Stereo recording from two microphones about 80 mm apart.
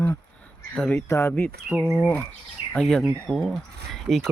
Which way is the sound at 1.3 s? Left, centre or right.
Left.